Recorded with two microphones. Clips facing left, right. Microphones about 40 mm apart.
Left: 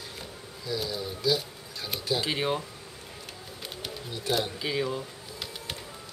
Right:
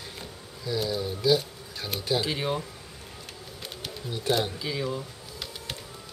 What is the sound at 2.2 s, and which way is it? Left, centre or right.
Speech, centre.